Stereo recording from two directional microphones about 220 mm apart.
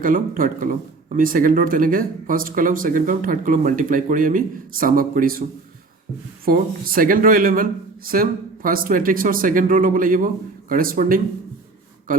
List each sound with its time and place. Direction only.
0.0 s speech: 40° right (ahead or behind)